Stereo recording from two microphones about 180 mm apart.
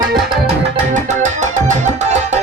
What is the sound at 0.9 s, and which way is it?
Music, 45° right (ahead or behind).